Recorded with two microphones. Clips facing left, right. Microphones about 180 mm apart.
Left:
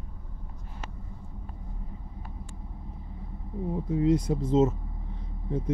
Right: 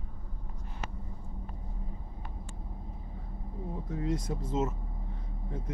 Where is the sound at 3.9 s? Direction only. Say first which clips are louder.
Left 9 dB; 20° left (ahead or behind).